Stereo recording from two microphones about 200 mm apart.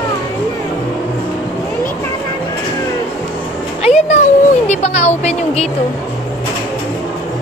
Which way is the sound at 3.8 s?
35° left (ahead or behind).